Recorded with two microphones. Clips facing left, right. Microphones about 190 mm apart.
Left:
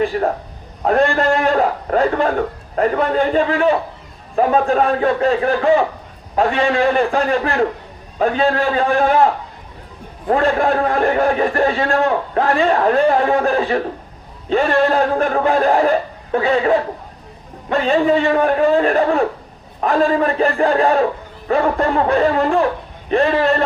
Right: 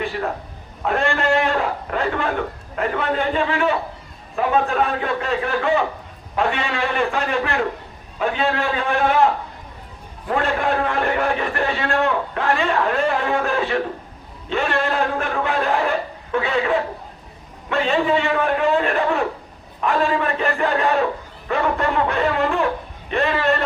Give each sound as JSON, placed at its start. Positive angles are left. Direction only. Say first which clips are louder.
{"t": 0.1, "sound": "a man's voice", "louder": "left 6 dB", "side_deg": 40}
{"t": 10.2, "sound": "a man's voice", "louder": "left 5 dB", "side_deg": 35}